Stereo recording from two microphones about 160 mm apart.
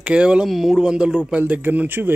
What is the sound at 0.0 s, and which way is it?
Speech, 5° right (ahead or behind).